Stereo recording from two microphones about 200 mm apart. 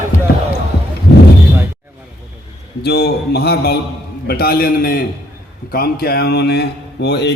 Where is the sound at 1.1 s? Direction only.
55° left (ahead or behind).